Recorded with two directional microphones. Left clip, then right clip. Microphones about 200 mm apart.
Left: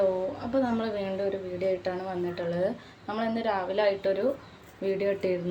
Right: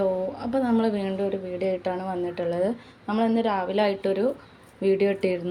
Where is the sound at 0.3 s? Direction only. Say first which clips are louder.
Right 3 dB; 40° right (ahead or behind).